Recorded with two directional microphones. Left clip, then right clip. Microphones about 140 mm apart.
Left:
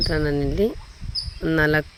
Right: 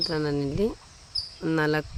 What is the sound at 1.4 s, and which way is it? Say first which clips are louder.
Cricket: left 6 dB; 15° left (ahead or behind).